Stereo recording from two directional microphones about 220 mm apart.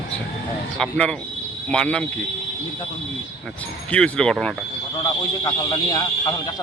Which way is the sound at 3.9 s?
5° left (ahead or behind).